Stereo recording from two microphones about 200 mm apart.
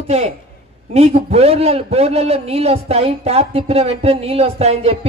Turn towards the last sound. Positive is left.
turn(degrees=-30)  # may be behind; listen again after turning